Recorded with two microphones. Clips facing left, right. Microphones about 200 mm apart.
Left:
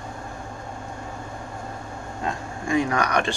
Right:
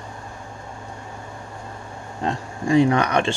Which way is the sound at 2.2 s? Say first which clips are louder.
Right 5 dB; 35° right (ahead or behind).